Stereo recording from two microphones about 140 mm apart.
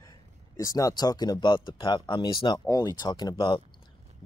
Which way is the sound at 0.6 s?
25° left (ahead or behind).